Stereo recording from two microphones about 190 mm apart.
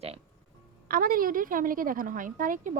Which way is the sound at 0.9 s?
50° right (ahead or behind).